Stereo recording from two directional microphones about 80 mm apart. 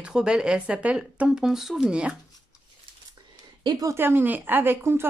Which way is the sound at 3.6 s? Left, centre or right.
Right.